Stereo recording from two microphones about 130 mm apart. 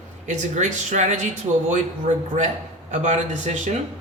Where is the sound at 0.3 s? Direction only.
65° right (ahead or behind).